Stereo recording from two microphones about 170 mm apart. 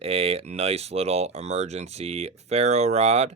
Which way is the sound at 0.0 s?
35° right (ahead or behind).